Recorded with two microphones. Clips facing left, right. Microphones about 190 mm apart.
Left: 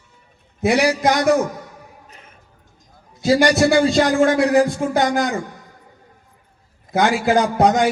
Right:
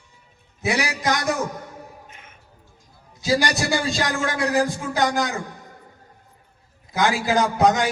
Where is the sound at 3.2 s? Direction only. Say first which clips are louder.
Left 7 dB; 55° left (ahead or behind).